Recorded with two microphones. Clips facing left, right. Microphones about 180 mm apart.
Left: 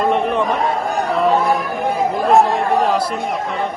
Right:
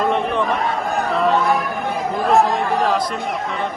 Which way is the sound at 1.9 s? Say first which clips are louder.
Left 3 dB; centre (ahead or behind).